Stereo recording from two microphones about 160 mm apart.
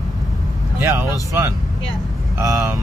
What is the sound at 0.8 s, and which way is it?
Speech, 15° right (ahead or behind).